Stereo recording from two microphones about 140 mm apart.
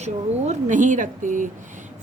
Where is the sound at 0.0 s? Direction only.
60° right (ahead or behind).